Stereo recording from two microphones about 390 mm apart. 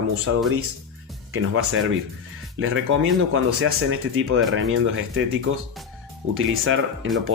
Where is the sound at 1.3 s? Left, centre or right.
Right.